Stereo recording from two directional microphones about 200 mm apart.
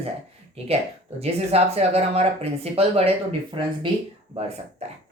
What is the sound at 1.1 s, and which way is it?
Speech, 30° right (ahead or behind).